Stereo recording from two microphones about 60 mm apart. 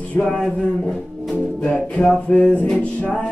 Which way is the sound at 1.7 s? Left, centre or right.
Centre.